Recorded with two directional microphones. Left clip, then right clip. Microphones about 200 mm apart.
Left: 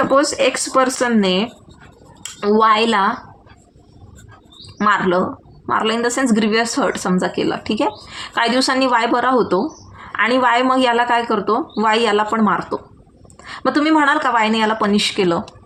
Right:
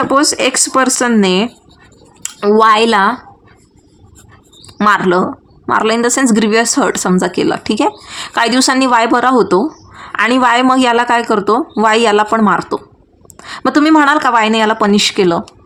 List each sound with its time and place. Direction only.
0.0 s speech: 35° right (ahead or behind)
4.8 s speech: 40° right (ahead or behind)